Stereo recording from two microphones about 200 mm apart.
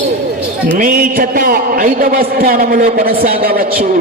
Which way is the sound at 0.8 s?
45° right (ahead or behind).